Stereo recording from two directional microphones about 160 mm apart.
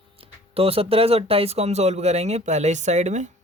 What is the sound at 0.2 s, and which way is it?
Speech, 35° right (ahead or behind).